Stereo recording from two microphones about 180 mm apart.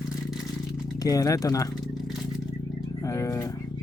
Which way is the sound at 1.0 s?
20° left (ahead or behind).